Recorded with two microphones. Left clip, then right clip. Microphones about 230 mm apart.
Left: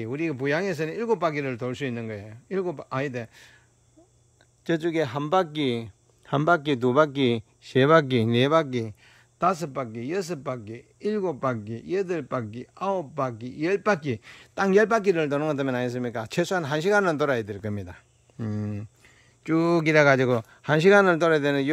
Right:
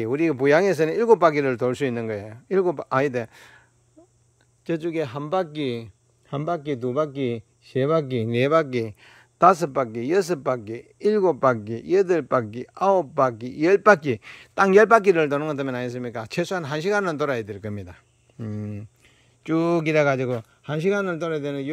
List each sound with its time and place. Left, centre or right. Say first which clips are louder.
0.0 s speech: right 7 dB; centre
4.6 s a man's voice: left 1 dB; centre